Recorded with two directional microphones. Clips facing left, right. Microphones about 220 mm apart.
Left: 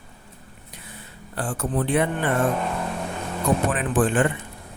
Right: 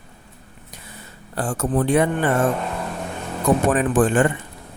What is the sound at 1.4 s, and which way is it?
Speech, 45° right (ahead or behind).